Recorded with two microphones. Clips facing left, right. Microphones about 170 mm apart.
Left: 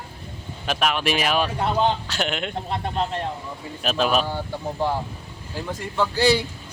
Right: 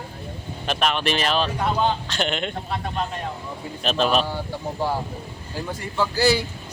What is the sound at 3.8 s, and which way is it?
Speech, 5° left (ahead or behind).